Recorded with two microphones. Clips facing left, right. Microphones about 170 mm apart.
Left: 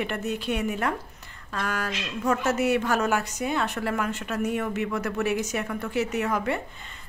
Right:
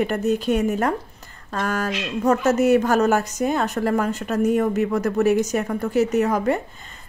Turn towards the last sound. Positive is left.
turn(degrees=-40)  # may be behind; listen again after turning